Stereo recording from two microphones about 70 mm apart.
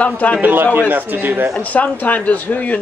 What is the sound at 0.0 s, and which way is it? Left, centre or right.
Speech, centre.